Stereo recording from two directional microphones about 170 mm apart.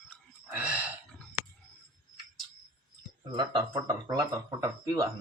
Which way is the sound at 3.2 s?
25° right (ahead or behind).